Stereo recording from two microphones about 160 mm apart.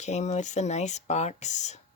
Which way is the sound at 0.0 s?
45° left (ahead or behind).